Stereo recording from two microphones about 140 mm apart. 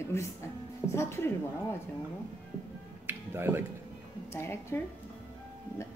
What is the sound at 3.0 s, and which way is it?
Finger snapping, 15° right (ahead or behind).